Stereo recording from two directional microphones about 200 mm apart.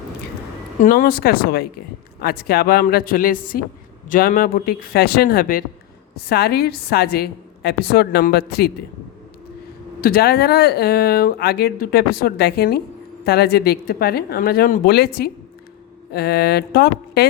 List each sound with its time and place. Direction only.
0.8 s speech: 45° left (ahead or behind)
10.0 s speech: 50° left (ahead or behind)